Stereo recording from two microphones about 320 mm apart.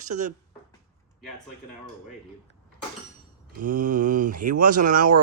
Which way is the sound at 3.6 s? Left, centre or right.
Right.